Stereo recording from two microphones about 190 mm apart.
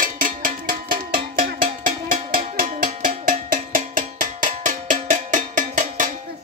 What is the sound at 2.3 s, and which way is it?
Music, 45° right (ahead or behind).